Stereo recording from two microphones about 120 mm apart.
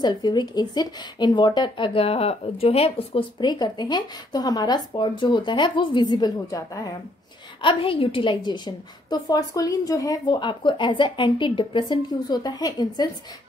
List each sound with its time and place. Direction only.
0.0 s speech: 35° left (ahead or behind)
7.6 s speech: 50° left (ahead or behind)